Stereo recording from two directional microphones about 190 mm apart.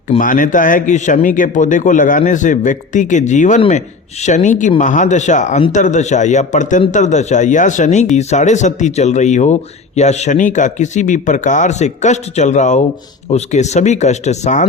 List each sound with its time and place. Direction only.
0.2 s speech: 45° left (ahead or behind)